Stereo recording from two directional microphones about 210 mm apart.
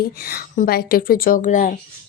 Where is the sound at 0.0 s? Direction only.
45° left (ahead or behind).